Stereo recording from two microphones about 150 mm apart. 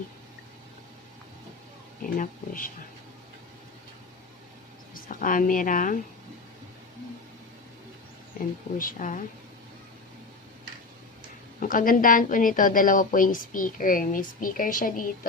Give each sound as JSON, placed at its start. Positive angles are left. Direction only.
{"t": 2.0, "sound": "a woman's voice", "side_deg": 60}
{"t": 4.9, "sound": "a woman's voice", "side_deg": 65}
{"t": 8.8, "sound": "a woman's voice", "side_deg": 65}
{"t": 11.6, "sound": "a woman's voice", "side_deg": 65}